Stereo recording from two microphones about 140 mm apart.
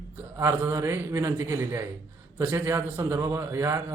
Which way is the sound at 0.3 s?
20° right (ahead or behind).